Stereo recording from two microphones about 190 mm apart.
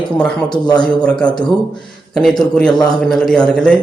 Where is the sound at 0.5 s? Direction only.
25° left (ahead or behind).